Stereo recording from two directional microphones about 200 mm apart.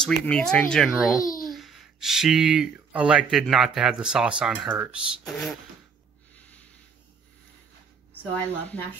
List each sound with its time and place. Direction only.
0.0 s speech: 5° left (ahead or behind)
6.3 s snort: 5° left (ahead or behind)
8.1 s speech: 10° left (ahead or behind)